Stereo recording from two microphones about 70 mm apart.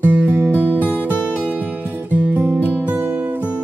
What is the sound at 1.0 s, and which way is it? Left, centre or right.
Music, left.